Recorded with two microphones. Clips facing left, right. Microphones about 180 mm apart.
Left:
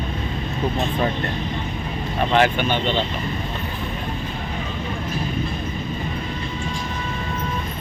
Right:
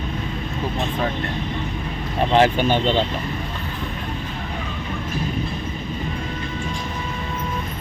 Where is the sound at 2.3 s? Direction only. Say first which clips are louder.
Right 2 dB; 30° right (ahead or behind).